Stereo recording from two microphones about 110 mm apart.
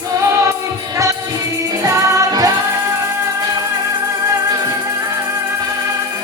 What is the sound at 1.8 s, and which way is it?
Music, 30° right (ahead or behind).